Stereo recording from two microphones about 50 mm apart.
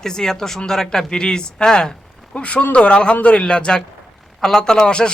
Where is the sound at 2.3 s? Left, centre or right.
Left.